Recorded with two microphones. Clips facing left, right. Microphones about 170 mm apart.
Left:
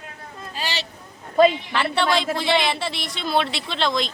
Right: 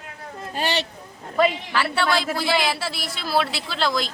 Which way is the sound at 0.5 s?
55° right (ahead or behind).